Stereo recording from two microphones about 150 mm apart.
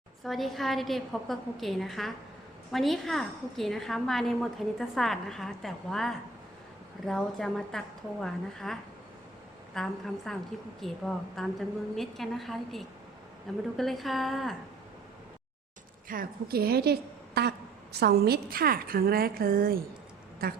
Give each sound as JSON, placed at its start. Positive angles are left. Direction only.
{"t": 0.3, "sound": "a woman's voice", "side_deg": 0}
{"t": 16.0, "sound": "a woman's voice", "side_deg": -80}